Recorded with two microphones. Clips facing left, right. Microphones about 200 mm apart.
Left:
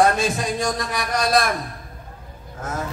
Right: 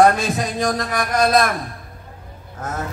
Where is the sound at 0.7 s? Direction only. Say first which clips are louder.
Right 3 dB; 50° right (ahead or behind).